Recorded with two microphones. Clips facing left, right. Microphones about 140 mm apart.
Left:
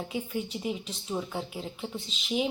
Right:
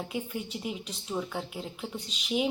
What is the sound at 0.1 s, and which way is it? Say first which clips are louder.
A woman's voice: left 2 dB; centre (ahead or behind).